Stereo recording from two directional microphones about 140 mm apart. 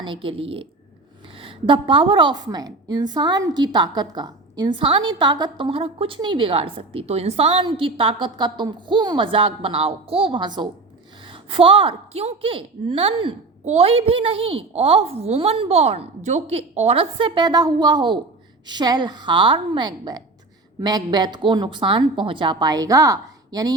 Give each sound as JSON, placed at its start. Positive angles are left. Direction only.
{"t": 0.0, "sound": "a woman's voice", "side_deg": -40}